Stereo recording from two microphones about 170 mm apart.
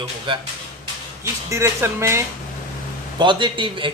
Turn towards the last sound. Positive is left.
turn(degrees=-30)  # may be behind; listen again after turning